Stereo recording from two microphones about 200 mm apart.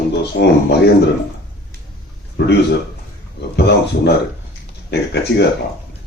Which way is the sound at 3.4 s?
55° left (ahead or behind).